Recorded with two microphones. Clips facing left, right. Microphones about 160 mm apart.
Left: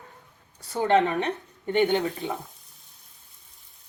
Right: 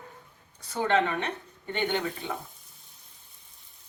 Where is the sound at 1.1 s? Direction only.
40° left (ahead or behind).